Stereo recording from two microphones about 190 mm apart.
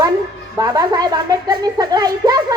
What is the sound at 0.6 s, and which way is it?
A child's voice, 20° right (ahead or behind).